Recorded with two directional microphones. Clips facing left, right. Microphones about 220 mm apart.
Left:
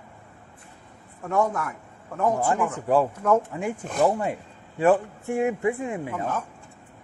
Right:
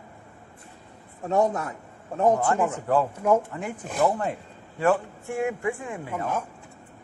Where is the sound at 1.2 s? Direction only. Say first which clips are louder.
Right 1 dB; 25° right (ahead or behind).